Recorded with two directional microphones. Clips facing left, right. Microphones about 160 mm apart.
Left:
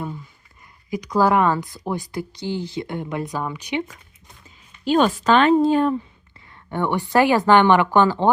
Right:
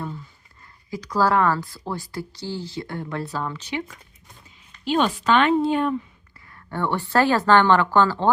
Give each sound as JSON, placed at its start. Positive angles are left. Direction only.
{"t": 0.9, "sound": "a woman's voice", "side_deg": 20}
{"t": 4.9, "sound": "a woman's voice", "side_deg": 45}
{"t": 6.5, "sound": "a woman's voice", "side_deg": 20}